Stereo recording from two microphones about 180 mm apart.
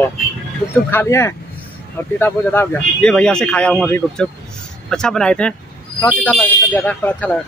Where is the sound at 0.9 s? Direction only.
15° left (ahead or behind).